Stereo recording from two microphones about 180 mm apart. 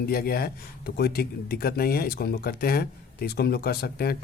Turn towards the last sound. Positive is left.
turn(degrees=60)  # may be behind; listen again after turning